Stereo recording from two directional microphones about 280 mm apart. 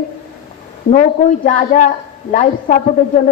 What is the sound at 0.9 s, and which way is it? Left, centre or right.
Speech, left.